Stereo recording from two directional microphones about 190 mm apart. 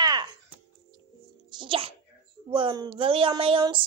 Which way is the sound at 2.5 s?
25° right (ahead or behind).